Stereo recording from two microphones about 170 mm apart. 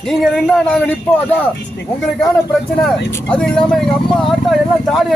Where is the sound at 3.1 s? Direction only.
5° left (ahead or behind).